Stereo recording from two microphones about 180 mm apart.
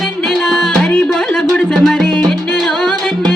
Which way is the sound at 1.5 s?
Centre (ahead or behind).